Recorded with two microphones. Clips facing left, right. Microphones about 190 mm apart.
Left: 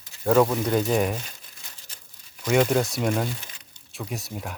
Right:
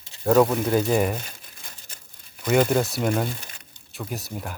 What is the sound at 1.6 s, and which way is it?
Crumpling, 50° right (ahead or behind).